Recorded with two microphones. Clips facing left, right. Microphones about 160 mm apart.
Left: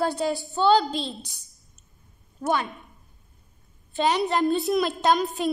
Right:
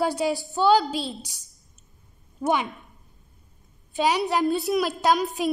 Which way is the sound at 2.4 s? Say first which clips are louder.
Right 1 dB; 15° right (ahead or behind).